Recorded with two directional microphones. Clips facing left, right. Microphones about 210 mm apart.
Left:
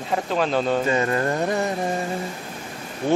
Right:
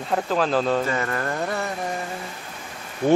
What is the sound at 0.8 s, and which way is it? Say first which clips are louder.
Music: left 4 dB; 20° left (ahead or behind).